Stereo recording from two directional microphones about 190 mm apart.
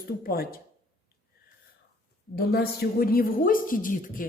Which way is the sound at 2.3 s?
55° left (ahead or behind).